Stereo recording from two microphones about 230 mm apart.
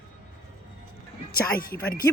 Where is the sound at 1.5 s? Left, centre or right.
Left.